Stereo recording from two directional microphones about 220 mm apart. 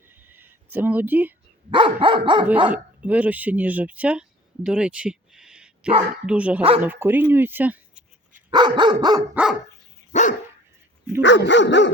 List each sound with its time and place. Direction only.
0.1 s a sound: 10° right (ahead or behind)
1.7 s dog: 25° right (ahead or behind)
2.6 s speech: 5° right (ahead or behind)
8.4 s dog: 20° right (ahead or behind)
9.3 s speech: 5° right (ahead or behind)
10.1 s dog: 35° left (ahead or behind)
11.2 s dog: 55° left (ahead or behind)